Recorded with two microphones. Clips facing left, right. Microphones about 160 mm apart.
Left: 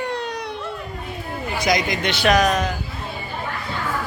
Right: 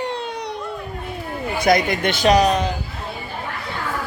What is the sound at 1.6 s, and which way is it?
Speech, 55° right (ahead or behind).